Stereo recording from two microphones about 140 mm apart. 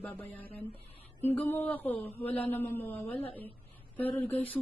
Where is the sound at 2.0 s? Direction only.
45° left (ahead or behind).